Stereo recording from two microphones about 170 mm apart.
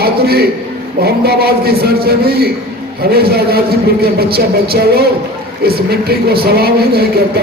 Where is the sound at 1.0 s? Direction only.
70° right (ahead or behind).